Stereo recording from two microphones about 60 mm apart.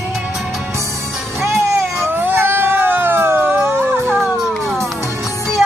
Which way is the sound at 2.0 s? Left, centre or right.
Right.